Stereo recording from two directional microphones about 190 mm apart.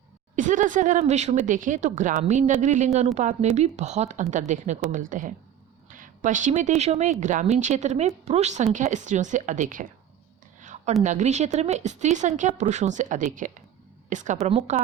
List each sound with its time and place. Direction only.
0.3 s speech: 40° right (ahead or behind)
10.6 s a sound: 40° right (ahead or behind)
11.0 s speech: 40° right (ahead or behind)